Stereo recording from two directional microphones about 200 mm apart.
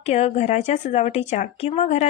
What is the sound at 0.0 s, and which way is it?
A woman's voice, 35° left (ahead or behind).